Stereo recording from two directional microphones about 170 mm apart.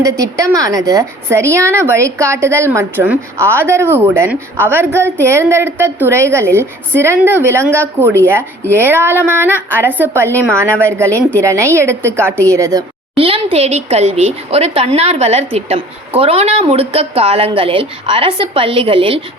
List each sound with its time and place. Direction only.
0.0 s a woman's voice: 20° right (ahead or behind)
13.1 s a woman's voice: 35° right (ahead or behind)